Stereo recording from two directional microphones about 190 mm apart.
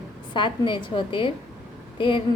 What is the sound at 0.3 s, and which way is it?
A woman's voice, 25° left (ahead or behind).